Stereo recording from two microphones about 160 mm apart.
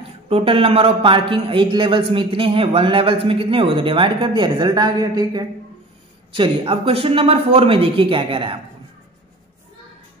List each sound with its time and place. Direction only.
0.3 s speech: 35° right (ahead or behind)